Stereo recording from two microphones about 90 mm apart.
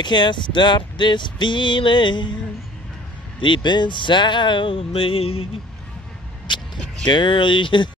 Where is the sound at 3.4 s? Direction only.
60° left (ahead or behind); by 5.4 s 90° left.